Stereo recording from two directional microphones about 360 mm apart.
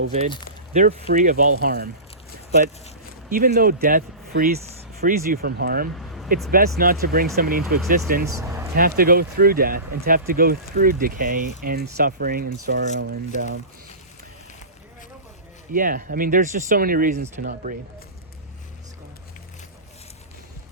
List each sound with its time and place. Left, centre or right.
0.7 s speech: right
3.2 s speech: right
8.3 s a sound: centre
8.7 s speech: right
15.7 s speech: right